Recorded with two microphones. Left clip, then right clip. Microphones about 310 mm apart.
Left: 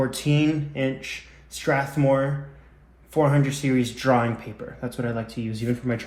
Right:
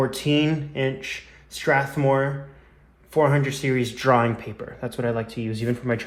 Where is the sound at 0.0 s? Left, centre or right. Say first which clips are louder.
Right 2 dB; right.